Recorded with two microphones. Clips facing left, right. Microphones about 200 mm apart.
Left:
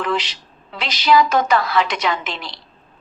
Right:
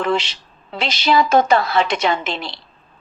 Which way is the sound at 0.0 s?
25° right (ahead or behind).